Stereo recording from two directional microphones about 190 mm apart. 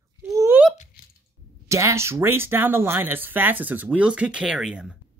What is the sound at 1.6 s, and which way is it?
Speech, 15° right (ahead or behind).